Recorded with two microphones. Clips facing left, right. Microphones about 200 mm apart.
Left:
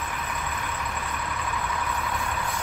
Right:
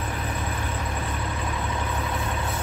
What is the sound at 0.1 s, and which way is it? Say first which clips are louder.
Vehicle: right 3 dB; 30° right (ahead or behind).